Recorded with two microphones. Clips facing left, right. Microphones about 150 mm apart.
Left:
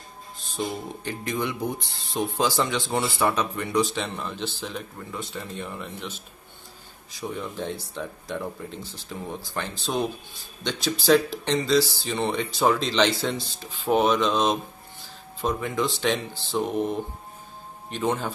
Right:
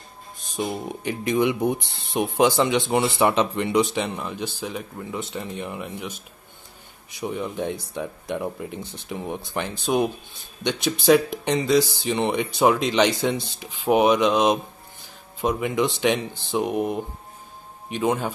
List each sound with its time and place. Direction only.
1.0 s speech: 20° right (ahead or behind)